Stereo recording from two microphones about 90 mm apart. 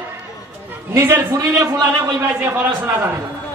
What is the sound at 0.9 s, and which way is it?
Speech, 30° right (ahead or behind).